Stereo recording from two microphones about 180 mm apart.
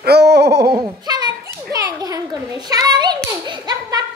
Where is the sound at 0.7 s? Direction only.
20° right (ahead or behind).